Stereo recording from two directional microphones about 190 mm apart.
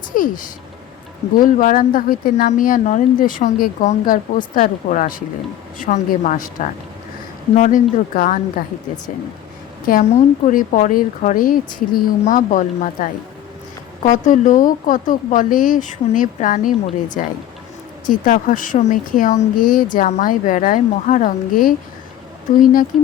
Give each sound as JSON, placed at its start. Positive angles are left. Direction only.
{"t": 0.1, "sound": "a woman's voice", "side_deg": 45}
{"t": 1.4, "sound": "a woman's voice", "side_deg": 45}
{"t": 9.8, "sound": "a woman's voice", "side_deg": 45}
{"t": 18.1, "sound": "a woman's voice", "side_deg": 45}